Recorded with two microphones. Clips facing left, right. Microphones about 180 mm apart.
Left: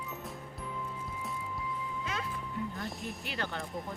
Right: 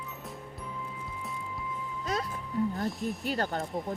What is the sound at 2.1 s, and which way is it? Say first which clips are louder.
Music: right 8 dB; 40° right (ahead or behind).